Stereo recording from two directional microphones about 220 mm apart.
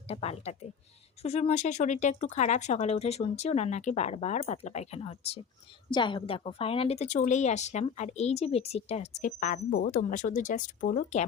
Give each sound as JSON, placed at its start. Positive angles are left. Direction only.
{"t": 0.1, "sound": "a woman's voice", "side_deg": 30}